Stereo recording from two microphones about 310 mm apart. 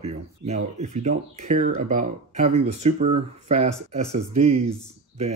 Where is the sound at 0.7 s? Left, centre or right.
Right.